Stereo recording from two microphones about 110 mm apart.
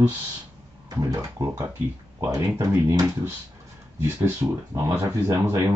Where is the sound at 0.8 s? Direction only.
35° right (ahead or behind).